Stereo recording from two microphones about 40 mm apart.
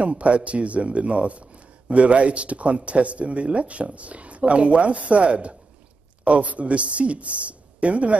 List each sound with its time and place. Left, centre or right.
0.0 s speech: right